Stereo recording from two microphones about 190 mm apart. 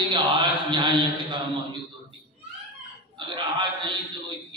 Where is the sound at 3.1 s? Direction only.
25° right (ahead or behind).